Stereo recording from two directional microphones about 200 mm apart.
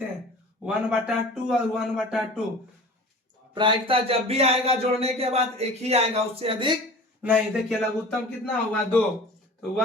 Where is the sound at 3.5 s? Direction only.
25° right (ahead or behind).